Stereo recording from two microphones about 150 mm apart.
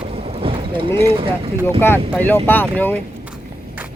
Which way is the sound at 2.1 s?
10° left (ahead or behind).